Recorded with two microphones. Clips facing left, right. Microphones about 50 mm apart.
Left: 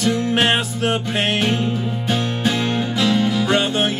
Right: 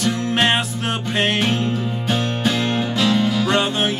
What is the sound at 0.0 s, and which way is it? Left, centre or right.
Music, centre.